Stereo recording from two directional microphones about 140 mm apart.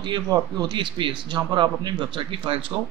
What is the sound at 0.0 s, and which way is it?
Speech, 30° right (ahead or behind).